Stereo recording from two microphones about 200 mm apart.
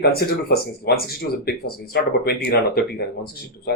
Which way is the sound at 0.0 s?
50° left (ahead or behind).